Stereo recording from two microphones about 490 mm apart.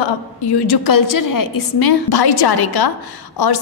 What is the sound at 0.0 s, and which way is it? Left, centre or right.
A woman's voice, left.